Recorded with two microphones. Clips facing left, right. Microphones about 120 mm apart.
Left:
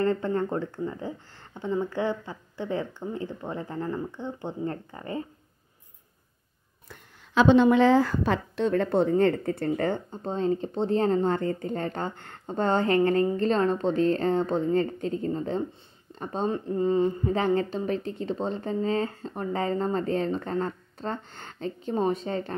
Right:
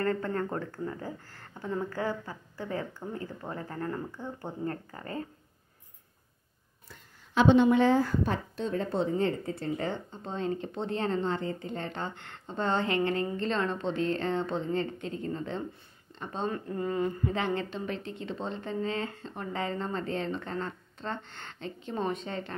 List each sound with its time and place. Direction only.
0.0 s speech: 25° left (ahead or behind)
6.9 s a woman's voice: 90° left; by 10.3 s 50° left (ahead or behind)
10.3 s a woman's voice: 35° left (ahead or behind)
16.4 s speech: 25° left (ahead or behind)
17.3 s speech: 35° left (ahead or behind)